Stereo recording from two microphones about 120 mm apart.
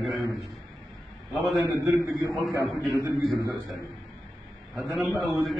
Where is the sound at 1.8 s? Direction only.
25° right (ahead or behind).